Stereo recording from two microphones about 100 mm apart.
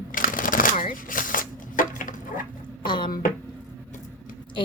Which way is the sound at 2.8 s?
50° left (ahead or behind).